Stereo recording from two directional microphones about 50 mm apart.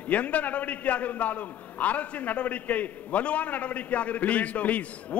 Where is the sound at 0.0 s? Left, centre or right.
Left.